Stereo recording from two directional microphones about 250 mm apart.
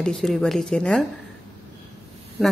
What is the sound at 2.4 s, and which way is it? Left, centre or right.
Speech, centre.